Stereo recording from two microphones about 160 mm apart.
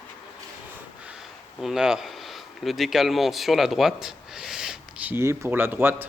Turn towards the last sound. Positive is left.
turn(degrees=-10)  # may be behind; listen again after turning